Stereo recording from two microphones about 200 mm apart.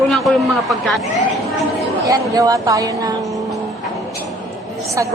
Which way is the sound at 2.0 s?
15° right (ahead or behind).